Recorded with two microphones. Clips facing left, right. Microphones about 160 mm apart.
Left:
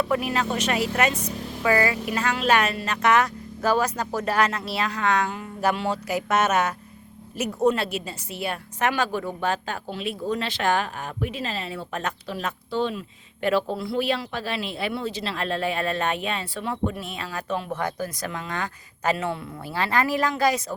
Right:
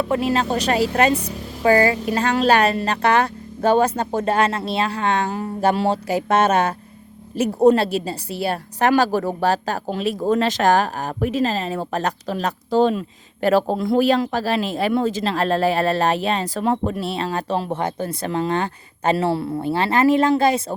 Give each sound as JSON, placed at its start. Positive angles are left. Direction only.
{"t": 0.0, "sound": "a woman's voice", "side_deg": -30}